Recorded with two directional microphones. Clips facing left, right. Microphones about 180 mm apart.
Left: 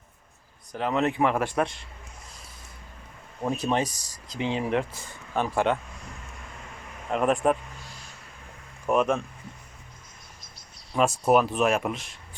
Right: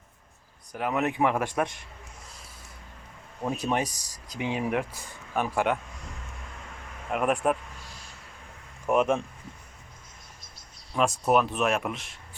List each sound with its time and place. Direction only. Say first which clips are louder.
0.7 s speech: left 2 dB; 10° right (ahead or behind)
3.6 s speech: left 2 dB; 15° right (ahead or behind)
7.1 s speech: left 2 dB; 5° right (ahead or behind)
8.9 s speech: even; 15° right (ahead or behind)
10.9 s speech: left 2 dB; centre (ahead or behind)